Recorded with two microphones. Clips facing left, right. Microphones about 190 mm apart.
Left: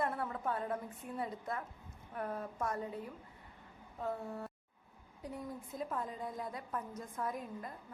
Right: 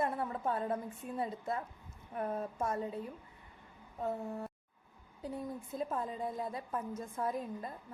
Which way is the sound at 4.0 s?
20° right (ahead or behind).